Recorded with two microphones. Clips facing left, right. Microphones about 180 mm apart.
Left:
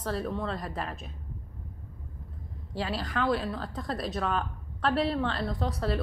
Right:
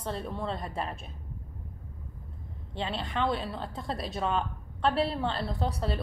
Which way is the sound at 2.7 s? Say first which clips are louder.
Left 1 dB; 25° right (ahead or behind).